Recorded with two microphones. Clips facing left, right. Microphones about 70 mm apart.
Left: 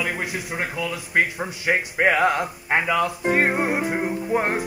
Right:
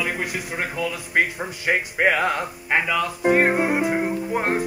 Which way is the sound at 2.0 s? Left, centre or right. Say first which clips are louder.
Left 2 dB; left.